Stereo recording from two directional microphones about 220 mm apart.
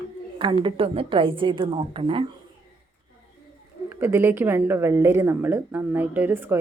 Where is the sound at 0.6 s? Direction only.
25° right (ahead or behind).